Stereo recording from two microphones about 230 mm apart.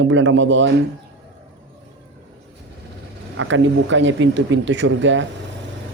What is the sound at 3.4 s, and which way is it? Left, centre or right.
Speech, right.